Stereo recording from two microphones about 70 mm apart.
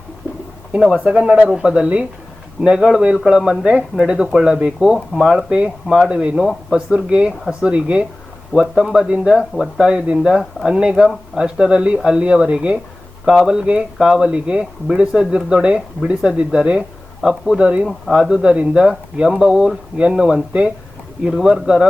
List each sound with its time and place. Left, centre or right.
0.7 s speech: centre
5.5 s speech: centre
6.7 s speech: centre
21.2 s speech: centre